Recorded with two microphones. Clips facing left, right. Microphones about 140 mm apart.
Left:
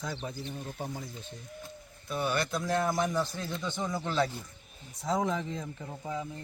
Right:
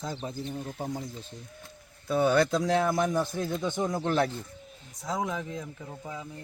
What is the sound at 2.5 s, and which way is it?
Speech, 85° right.